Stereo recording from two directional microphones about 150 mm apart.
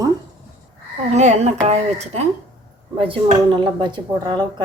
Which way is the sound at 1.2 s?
50° right (ahead or behind).